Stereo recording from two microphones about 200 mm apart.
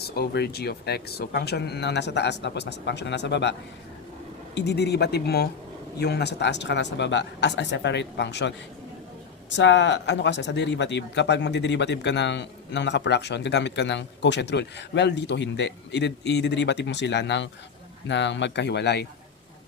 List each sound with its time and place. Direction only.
0.0 s speech: 55° left (ahead or behind)
4.5 s speech: 55° left (ahead or behind)